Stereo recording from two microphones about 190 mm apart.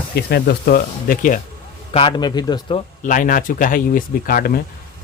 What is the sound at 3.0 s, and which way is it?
Speech, 45° left (ahead or behind).